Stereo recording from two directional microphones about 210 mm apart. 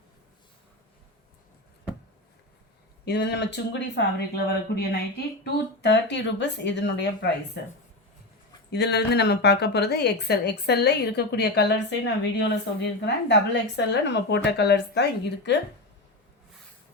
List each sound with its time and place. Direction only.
3.0 s a woman's voice: 55° left (ahead or behind)
8.7 s a woman's voice: 50° left (ahead or behind)